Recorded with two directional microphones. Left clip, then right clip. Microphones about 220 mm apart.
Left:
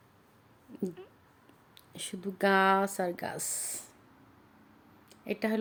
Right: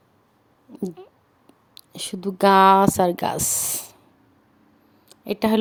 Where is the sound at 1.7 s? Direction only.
25° right (ahead or behind).